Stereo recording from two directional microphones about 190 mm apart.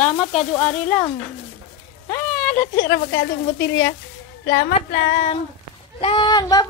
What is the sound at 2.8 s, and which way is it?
A woman's voice, 65° left (ahead or behind).